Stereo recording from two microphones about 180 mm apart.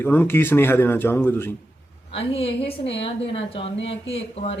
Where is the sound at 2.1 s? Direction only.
35° left (ahead or behind).